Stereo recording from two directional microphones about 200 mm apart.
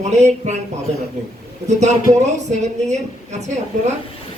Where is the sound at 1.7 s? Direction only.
35° right (ahead or behind).